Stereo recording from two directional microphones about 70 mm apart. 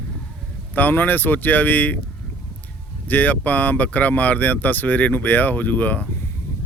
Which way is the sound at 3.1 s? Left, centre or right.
Left.